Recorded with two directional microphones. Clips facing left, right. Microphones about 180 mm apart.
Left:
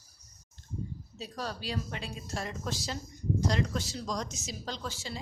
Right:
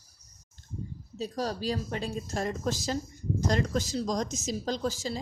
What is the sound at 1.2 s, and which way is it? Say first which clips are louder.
Speech: right 7 dB; 40° right (ahead or behind).